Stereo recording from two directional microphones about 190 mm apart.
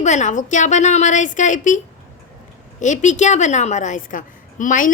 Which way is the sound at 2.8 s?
40° left (ahead or behind).